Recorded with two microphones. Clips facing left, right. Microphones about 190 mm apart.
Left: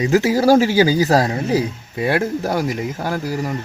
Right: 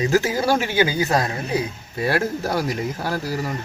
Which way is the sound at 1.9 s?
15° left (ahead or behind).